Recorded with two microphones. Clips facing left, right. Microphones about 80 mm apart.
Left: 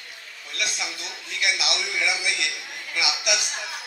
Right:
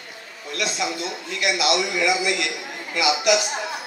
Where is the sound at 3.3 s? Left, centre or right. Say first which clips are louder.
Right 8 dB; right.